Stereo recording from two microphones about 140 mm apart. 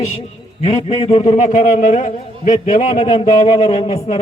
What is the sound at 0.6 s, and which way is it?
A man's voice, 50° left (ahead or behind).